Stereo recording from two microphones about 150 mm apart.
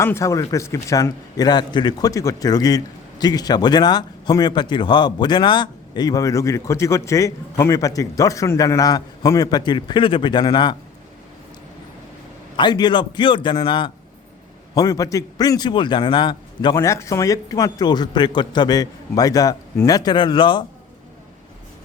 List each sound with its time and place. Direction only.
0.0 s a man's voice: 20° left (ahead or behind)
12.5 s a man's voice: 30° left (ahead or behind)
16.7 s a man's voice: 20° left (ahead or behind)